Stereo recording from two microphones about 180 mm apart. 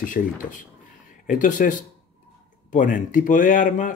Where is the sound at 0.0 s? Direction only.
45° left (ahead or behind).